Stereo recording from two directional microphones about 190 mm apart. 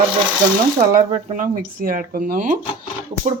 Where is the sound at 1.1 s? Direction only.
45° right (ahead or behind).